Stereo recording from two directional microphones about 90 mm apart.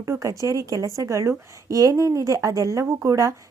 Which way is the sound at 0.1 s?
35° right (ahead or behind).